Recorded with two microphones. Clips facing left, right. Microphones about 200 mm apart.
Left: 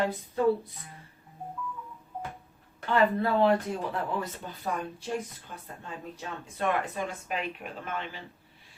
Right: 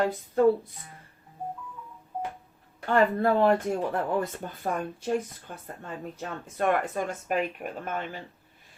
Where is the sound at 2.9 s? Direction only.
50° right (ahead or behind).